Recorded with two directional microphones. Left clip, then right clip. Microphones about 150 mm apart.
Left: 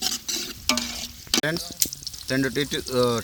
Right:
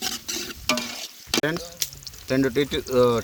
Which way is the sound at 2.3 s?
15° left (ahead or behind).